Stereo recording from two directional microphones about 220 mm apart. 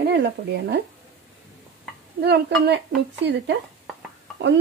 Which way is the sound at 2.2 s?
50° right (ahead or behind).